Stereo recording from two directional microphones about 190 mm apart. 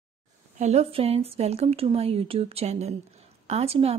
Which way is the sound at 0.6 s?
35° right (ahead or behind).